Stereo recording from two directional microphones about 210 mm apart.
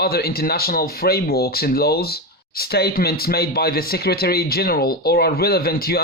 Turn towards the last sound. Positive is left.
turn(degrees=45)  # may be behind; listen again after turning